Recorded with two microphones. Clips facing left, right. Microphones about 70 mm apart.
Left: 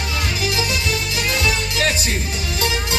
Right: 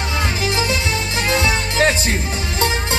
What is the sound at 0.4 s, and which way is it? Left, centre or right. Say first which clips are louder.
Music: right 1 dB; right.